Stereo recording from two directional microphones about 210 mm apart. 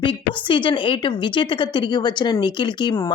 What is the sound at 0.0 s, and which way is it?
A woman's voice, 25° left (ahead or behind).